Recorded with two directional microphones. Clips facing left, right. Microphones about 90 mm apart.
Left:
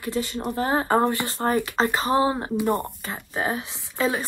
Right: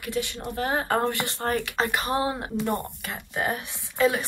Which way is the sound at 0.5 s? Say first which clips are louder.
Left 4 dB; 25° left (ahead or behind).